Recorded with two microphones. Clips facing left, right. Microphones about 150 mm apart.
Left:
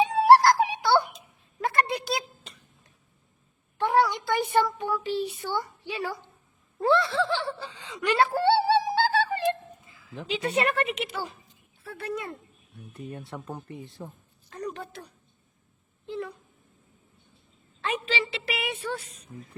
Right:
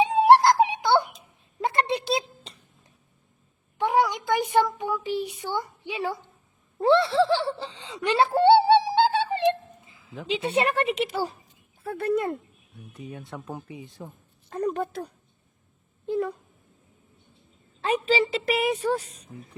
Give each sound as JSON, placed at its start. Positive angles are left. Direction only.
{"t": 0.0, "sound": "music", "side_deg": -20}
{"t": 1.6, "sound": "a sound", "side_deg": -25}
{"t": 3.8, "sound": "a sound", "side_deg": -15}
{"t": 6.8, "sound": "whimper", "side_deg": -30}
{"t": 10.5, "sound": "a woman's voice", "side_deg": -30}
{"t": 11.8, "sound": "speech", "side_deg": -50}
{"t": 12.7, "sound": "speech", "side_deg": 0}
{"t": 14.5, "sound": "a sound", "side_deg": -45}
{"t": 16.0, "sound": "speech", "side_deg": -45}
{"t": 17.7, "sound": "a woman's voice", "side_deg": -35}